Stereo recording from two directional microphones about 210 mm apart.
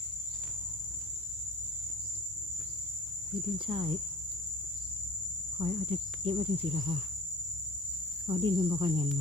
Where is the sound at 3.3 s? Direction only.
25° right (ahead or behind).